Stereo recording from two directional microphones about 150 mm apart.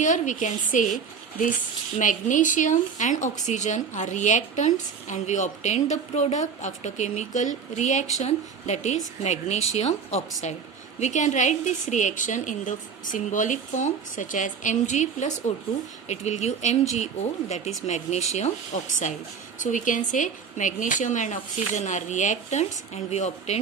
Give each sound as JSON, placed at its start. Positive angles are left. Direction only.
{"t": 0.0, "sound": "a woman's voice", "side_deg": 55}
{"t": 2.0, "sound": "a woman's voice", "side_deg": 60}